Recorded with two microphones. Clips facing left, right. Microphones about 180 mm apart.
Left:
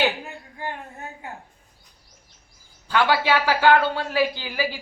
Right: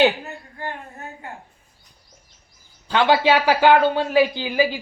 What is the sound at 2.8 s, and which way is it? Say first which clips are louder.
Speech: right 4 dB; 20° right (ahead or behind).